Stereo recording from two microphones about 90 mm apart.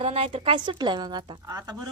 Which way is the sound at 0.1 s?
90° right.